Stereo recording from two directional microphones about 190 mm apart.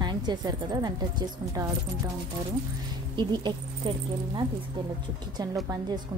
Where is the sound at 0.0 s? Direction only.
25° right (ahead or behind).